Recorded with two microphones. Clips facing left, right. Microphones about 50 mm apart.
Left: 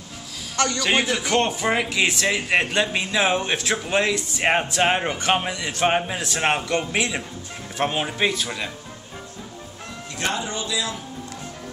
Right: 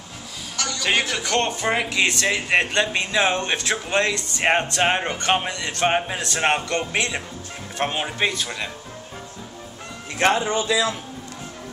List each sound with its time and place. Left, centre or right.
0.7 s a man's voice: centre
10.2 s speech: right